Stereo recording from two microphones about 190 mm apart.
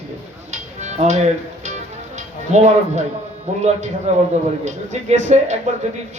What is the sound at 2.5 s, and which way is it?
Speech, 35° right (ahead or behind).